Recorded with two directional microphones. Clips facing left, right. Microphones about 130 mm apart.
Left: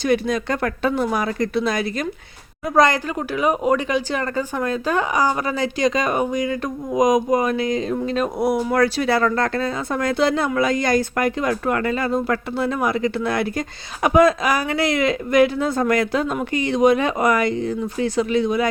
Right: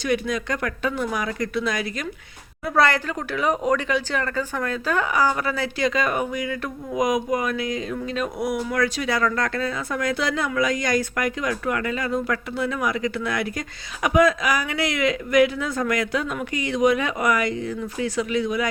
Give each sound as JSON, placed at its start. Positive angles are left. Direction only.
{"t": 0.0, "sound": "speech", "side_deg": 30}
{"t": 2.6, "sound": "speech", "side_deg": 15}